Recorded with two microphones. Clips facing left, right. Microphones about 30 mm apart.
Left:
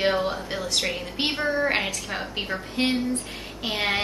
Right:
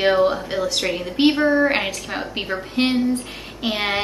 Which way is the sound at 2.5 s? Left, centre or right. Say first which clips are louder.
Right 6 dB; right.